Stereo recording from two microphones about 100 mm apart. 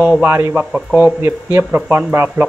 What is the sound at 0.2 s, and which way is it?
Speech, 25° right (ahead or behind).